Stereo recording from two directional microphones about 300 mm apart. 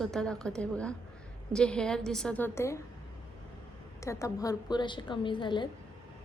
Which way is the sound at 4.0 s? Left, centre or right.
Centre.